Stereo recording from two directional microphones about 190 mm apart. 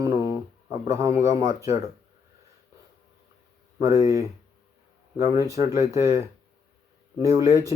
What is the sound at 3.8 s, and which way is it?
Speech, 15° right (ahead or behind).